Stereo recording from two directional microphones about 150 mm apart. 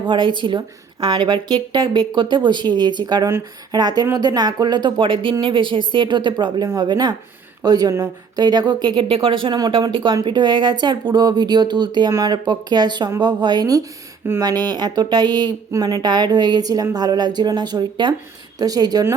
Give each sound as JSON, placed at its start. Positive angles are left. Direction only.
{"t": 0.1, "sound": "a woman's voice", "side_deg": -30}